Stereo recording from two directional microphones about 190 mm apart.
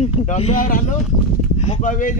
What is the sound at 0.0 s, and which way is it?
Speech, 35° left (ahead or behind).